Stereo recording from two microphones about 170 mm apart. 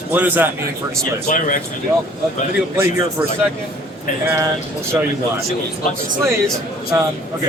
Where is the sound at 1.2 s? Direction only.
50° left (ahead or behind).